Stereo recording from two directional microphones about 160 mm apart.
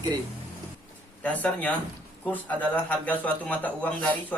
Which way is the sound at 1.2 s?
10° left (ahead or behind).